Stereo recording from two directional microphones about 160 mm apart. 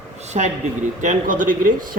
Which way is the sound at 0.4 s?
45° right (ahead or behind).